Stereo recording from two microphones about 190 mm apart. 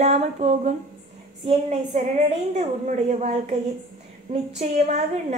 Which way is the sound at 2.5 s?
40° right (ahead or behind).